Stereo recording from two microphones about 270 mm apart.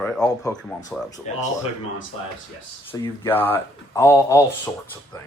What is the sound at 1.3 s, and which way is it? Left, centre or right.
Speech, left.